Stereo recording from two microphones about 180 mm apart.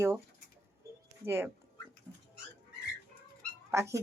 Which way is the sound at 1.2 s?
15° right (ahead or behind).